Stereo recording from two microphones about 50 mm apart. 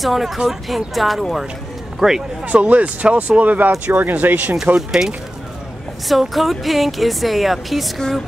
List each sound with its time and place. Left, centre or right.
0.0 s speech: centre
2.4 s speech: right
4.7 s speech: centre